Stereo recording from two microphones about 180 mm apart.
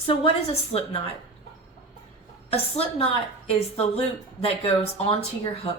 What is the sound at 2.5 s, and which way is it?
A woman's voice, 35° left (ahead or behind).